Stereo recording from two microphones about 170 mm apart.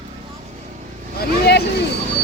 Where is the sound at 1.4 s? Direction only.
75° left (ahead or behind).